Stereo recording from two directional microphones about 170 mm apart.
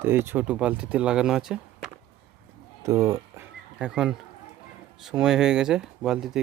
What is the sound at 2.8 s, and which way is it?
Speech, 20° right (ahead or behind).